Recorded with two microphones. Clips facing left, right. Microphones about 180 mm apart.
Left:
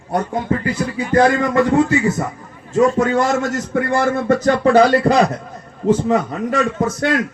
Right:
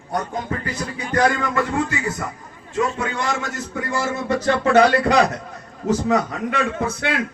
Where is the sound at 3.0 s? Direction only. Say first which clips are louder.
Left 9 dB; 45° left (ahead or behind).